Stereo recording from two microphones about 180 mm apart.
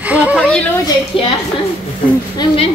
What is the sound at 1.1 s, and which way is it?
Speech, 30° left (ahead or behind).